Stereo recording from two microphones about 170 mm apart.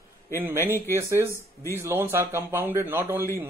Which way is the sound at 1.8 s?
15° right (ahead or behind).